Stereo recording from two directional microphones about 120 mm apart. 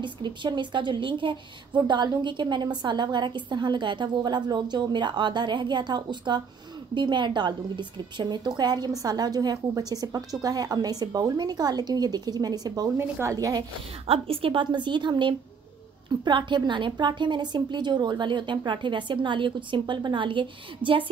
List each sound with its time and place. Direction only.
0.0 s a woman's voice: 40° right (ahead or behind)
14.0 s a woman's voice: 50° right (ahead or behind)